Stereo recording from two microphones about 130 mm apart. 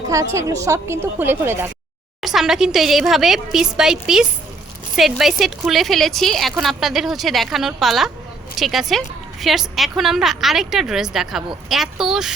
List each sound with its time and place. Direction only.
0.1 s a woman's voice: 25° right (ahead or behind)
2.2 s a woman's voice: 5° right (ahead or behind)